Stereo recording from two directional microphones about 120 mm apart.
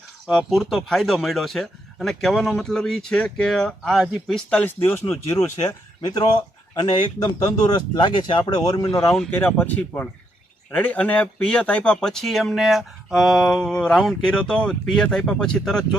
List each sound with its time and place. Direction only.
0.3 s speech: centre (ahead or behind)
4.4 s speech: 10° left (ahead or behind)
6.0 s speech: 35° left (ahead or behind)
9.3 s speech: 15° left (ahead or behind)